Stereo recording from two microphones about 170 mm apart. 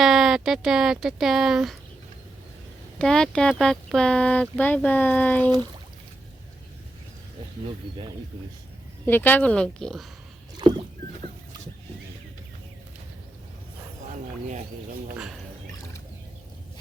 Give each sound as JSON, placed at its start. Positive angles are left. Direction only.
{"t": 0.0, "sound": "speech", "side_deg": -5}
{"t": 3.0, "sound": "speech", "side_deg": 5}
{"t": 9.0, "sound": "speech", "side_deg": 10}
{"t": 10.6, "sound": "rowboat", "side_deg": -25}